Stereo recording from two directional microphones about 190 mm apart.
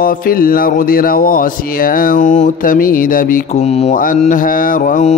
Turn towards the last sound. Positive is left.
turn(degrees=45)  # may be behind; listen again after turning